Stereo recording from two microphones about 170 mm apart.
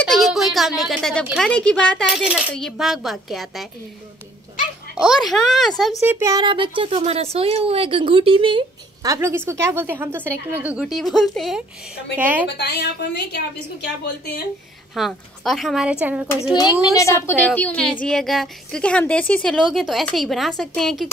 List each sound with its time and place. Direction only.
0.1 s a sound: centre (ahead or behind)
1.2 s speech: centre (ahead or behind)
4.9 s speech: 5° right (ahead or behind)
6.0 s speech: 15° right (ahead or behind)
9.0 s speech: 20° right (ahead or behind)
12.4 s a woman's voice: 75° left (ahead or behind)
15.0 s speech: centre (ahead or behind)
16.5 s a woman's voice: 20° left (ahead or behind); by 21.1 s centre (ahead or behind)